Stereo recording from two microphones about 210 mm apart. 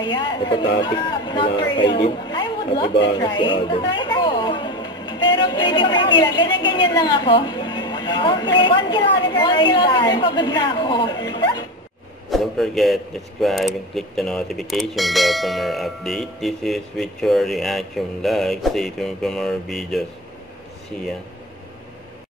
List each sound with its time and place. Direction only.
0.0 s speech: 20° left (ahead or behind)
12.3 s a man's voice: centre (ahead or behind)